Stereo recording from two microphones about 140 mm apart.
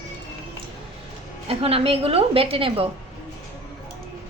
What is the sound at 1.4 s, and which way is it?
A woman's voice, 45° right (ahead or behind).